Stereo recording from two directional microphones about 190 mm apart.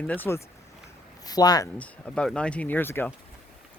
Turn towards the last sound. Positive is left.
turn(degrees=10)  # may be behind; listen again after turning